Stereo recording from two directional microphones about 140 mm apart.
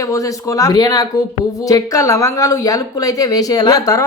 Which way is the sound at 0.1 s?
25° left (ahead or behind).